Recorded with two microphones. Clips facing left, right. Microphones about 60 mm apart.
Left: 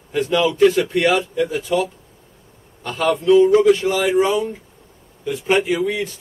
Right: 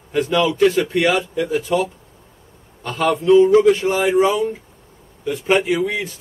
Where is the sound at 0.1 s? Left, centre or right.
Centre.